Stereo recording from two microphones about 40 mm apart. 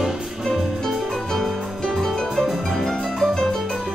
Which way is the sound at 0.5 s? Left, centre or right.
Centre.